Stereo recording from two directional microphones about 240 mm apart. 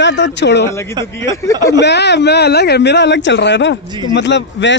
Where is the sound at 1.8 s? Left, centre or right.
Left.